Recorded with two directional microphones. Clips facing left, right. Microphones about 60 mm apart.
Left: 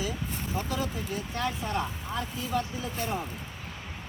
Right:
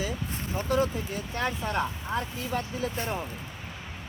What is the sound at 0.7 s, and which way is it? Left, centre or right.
Speech, right.